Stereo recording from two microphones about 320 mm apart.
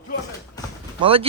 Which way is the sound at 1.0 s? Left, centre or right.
Centre.